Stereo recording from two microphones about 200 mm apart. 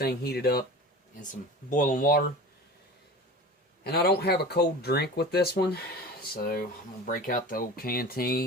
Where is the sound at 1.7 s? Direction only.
40° left (ahead or behind).